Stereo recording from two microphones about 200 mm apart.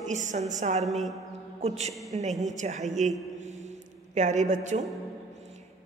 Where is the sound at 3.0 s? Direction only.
35° right (ahead or behind).